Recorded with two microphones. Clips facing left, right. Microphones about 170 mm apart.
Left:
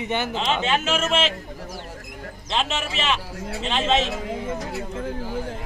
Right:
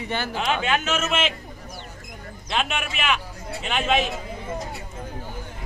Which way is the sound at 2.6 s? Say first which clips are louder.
Left 1 dB; 30° left (ahead or behind).